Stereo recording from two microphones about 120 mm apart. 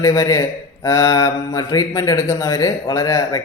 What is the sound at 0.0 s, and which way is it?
Speech, 25° left (ahead or behind).